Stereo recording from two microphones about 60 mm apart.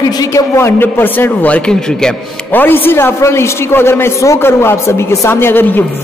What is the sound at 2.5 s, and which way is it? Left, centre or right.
A man's voice, left.